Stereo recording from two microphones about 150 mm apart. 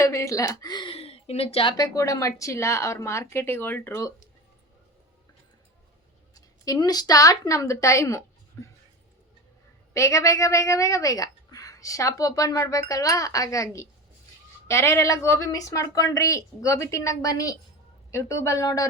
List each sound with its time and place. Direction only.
0.0 s speech: 20° left (ahead or behind); by 1.7 s 40° left (ahead or behind)
1.7 s a woman's voice: 20° left (ahead or behind)
6.3 s a woman's voice: 25° left (ahead or behind)
9.9 s a woman's voice: 20° left (ahead or behind)